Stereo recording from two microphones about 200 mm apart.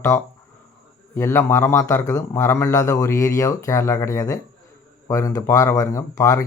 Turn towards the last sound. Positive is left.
turn(degrees=15)  # may be behind; listen again after turning